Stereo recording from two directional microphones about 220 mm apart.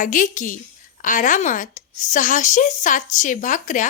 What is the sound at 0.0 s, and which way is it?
Speech, 35° left (ahead or behind).